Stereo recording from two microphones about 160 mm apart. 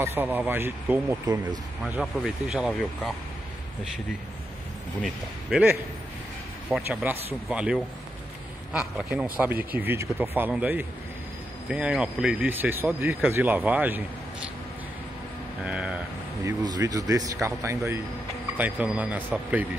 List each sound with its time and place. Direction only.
0.0 s speech: 10° right (ahead or behind)
1.9 s speech: 5° right (ahead or behind)
5.0 s speech: 5° right (ahead or behind)
15.6 s speech: 5° right (ahead or behind)
16.4 s a man's voice: 25° right (ahead or behind)